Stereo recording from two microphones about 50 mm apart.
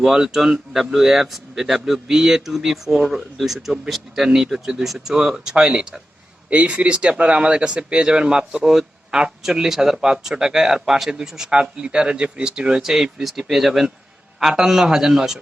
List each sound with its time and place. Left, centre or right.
0.0 s speech: centre
6.5 s speech: right; by 15.4 s centre